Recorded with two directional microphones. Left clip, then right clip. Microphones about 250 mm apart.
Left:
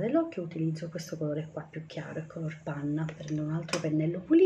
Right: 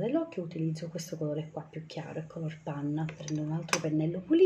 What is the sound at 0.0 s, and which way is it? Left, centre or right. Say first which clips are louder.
Speech: left 3 dB; centre.